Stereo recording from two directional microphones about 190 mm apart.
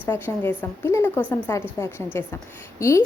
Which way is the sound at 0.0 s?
10° left (ahead or behind).